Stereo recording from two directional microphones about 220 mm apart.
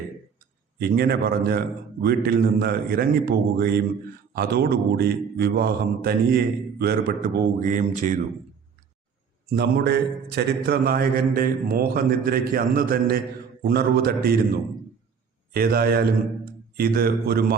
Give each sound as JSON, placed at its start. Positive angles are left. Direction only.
{"t": 0.3, "sound": "a man's voice", "side_deg": -45}
{"t": 9.5, "sound": "a man's voice", "side_deg": -45}